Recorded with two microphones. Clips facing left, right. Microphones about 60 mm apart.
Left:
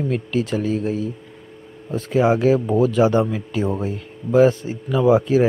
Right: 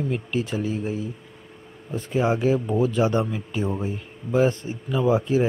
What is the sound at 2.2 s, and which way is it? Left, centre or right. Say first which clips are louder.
Speech: left 5 dB; left.